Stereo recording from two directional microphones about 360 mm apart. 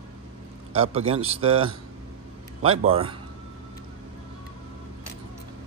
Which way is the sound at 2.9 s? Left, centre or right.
Centre.